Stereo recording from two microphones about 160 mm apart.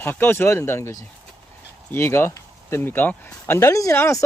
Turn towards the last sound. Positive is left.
turn(degrees=20)  # may be behind; listen again after turning